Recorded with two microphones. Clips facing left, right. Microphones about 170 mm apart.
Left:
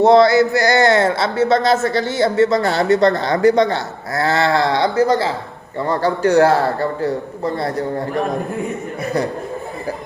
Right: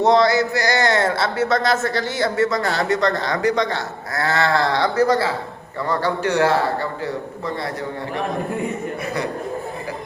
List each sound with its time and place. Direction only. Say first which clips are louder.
0.0 s speech: left 5 dB; 30° left (ahead or behind)
5.9 s speech: left 6 dB; 35° left (ahead or behind)